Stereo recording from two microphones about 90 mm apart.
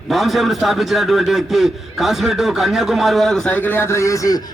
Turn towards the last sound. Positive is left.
turn(degrees=40)  # may be behind; listen again after turning